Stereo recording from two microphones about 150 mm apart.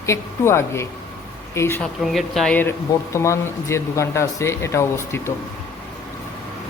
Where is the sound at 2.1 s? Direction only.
Centre (ahead or behind); by 4.9 s 20° left (ahead or behind).